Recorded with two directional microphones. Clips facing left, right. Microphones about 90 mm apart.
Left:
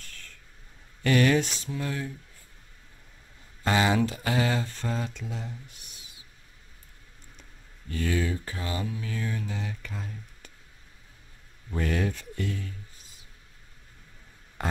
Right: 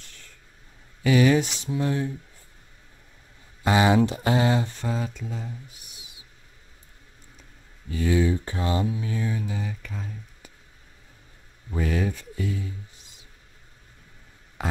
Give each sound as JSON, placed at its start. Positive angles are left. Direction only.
{"t": 1.0, "sound": "speech", "side_deg": -10}
{"t": 3.6, "sound": "speech", "side_deg": -20}
{"t": 4.8, "sound": "speech", "side_deg": -5}
{"t": 7.9, "sound": "speech", "side_deg": -15}
{"t": 11.7, "sound": "speech", "side_deg": -5}
{"t": 14.6, "sound": "a sound", "side_deg": 0}